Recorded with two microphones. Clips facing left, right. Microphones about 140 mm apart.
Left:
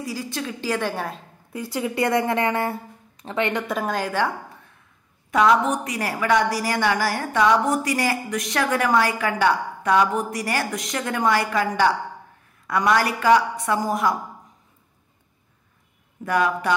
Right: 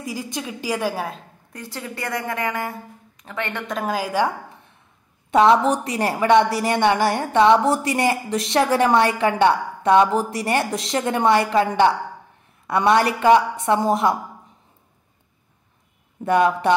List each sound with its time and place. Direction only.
0.0 s a woman's voice: 15° right (ahead or behind); by 1.6 s centre (ahead or behind)
1.6 s speech: 15° left (ahead or behind); by 2.7 s 30° left (ahead or behind)
3.2 s a sound: 25° left (ahead or behind)
3.4 s a woman's voice: 10° left (ahead or behind)
3.9 s a woman's voice: 10° right (ahead or behind)
5.3 s a woman's voice: 30° right (ahead or behind)
16.3 s a woman's voice: 25° right (ahead or behind)